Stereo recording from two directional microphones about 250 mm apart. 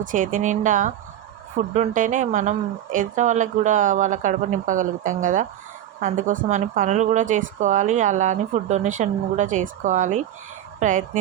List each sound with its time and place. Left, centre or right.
0.0 s a woman's voice: right